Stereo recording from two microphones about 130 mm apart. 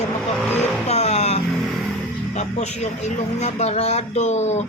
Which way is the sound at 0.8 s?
55° left (ahead or behind).